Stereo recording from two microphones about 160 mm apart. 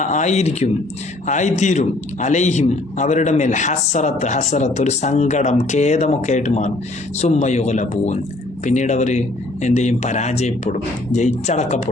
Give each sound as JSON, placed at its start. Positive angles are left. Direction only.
{"t": 0.0, "sound": "a man's voice", "side_deg": 45}